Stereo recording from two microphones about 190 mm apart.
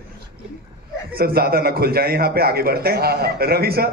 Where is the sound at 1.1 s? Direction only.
55° right (ahead or behind).